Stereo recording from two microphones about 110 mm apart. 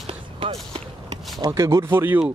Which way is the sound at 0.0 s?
55° right (ahead or behind).